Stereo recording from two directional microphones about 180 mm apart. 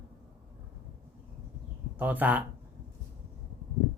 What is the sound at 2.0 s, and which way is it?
Speech, 10° right (ahead or behind).